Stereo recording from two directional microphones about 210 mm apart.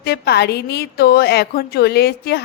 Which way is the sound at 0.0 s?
50° left (ahead or behind).